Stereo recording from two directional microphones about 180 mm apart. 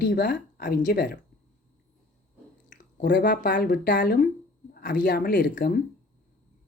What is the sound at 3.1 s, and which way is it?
Speech, 50° left (ahead or behind).